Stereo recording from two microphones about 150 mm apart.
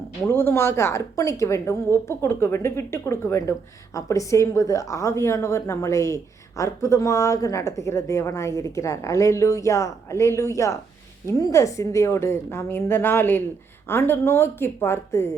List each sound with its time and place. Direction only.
0.3 s a woman's voice: 15° left (ahead or behind)